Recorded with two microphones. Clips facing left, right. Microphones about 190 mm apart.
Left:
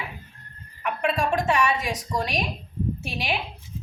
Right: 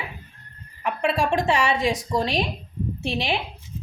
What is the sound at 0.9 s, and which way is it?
A woman's voice, 30° right (ahead or behind).